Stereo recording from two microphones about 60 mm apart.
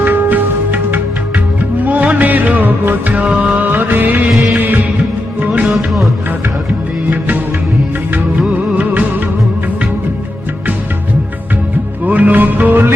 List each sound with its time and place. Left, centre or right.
0.0 s music: right
8.4 s music of bollywood: right
12.0 s music: right